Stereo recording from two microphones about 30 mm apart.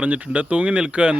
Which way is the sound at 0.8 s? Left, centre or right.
Right.